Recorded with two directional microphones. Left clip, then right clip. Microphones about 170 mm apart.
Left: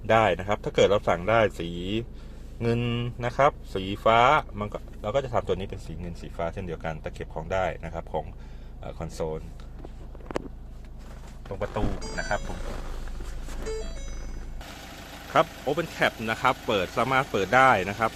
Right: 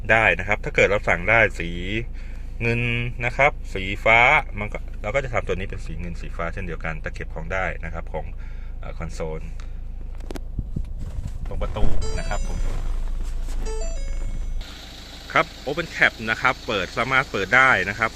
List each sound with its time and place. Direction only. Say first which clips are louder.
0.1 s speech: right 4 dB; centre (ahead or behind)
10.3 s a sound: left 5 dB; 30° right (ahead or behind)
11.6 s speech: even; centre (ahead or behind)
15.3 s speech: right 2 dB; centre (ahead or behind)